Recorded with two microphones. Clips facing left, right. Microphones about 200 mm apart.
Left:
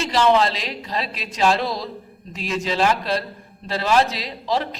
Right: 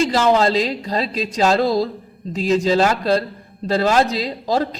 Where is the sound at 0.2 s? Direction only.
45° right (ahead or behind).